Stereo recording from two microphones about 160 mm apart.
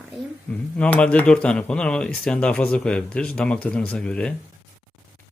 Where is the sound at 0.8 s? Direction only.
10° left (ahead or behind).